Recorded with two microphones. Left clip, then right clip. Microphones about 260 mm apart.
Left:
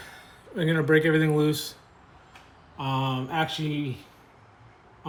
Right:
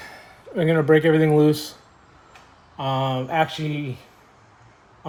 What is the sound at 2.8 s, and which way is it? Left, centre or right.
Speech, right.